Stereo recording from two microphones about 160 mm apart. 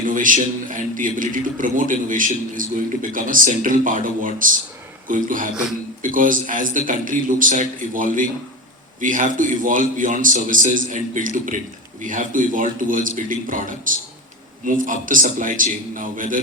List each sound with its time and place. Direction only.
0.0 s a man's voice: 55° right (ahead or behind)